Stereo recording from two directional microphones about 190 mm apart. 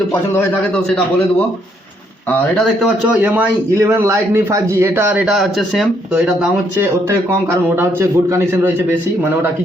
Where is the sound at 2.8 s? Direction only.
10° right (ahead or behind).